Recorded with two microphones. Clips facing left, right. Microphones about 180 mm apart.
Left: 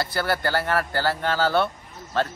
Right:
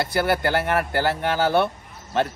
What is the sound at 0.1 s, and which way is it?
Speech, 20° right (ahead or behind).